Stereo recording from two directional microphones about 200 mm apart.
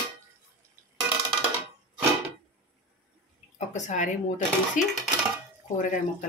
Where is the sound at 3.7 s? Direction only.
35° left (ahead or behind).